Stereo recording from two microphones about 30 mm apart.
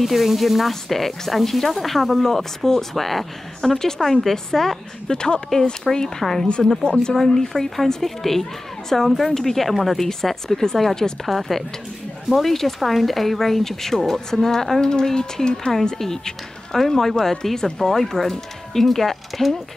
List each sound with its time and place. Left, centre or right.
0.0 s a woman's voice: centre
5.1 s speech: left
5.9 s a woman's voice: centre
6.8 s speech: left
7.2 s a woman's voice: centre
10.2 s a woman's voice: centre
11.2 s a woman's voice: centre